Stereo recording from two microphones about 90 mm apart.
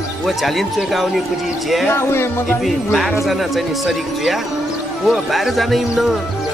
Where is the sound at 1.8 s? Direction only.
30° left (ahead or behind).